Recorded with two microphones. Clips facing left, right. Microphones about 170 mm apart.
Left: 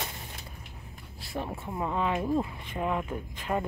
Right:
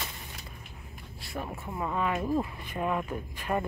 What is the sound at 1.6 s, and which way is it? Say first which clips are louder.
Speech: even; 20° left (ahead or behind).